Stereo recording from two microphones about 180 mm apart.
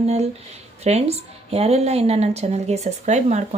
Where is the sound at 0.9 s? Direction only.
35° right (ahead or behind).